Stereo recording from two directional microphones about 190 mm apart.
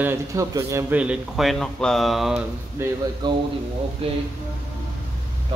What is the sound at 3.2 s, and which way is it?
Speech, 20° right (ahead or behind).